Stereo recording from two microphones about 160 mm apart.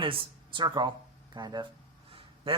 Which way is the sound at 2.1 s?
35° right (ahead or behind).